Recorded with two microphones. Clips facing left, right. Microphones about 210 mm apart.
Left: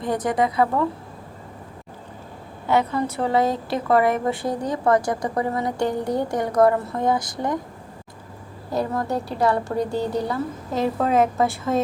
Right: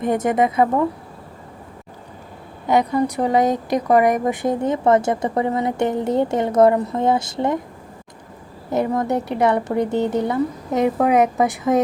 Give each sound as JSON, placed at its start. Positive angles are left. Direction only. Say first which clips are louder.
{"t": 0.0, "sound": "a woman's voice", "louder": "right 4 dB", "side_deg": -20}
{"t": 2.6, "sound": "a woman's voice", "louder": "right 3 dB", "side_deg": -15}
{"t": 8.7, "sound": "a woman's voice", "louder": "right 4 dB", "side_deg": -20}